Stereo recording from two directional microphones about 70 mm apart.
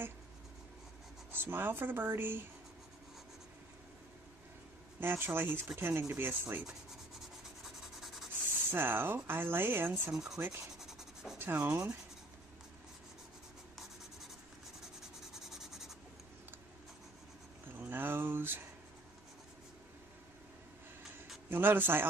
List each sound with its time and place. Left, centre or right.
1.3 s speech: right
5.0 s speech: right
8.7 s speech: right
10.8 s rub: centre
11.3 s speech: right
15.3 s writing: centre
17.7 s speech: right
21.5 s speech: right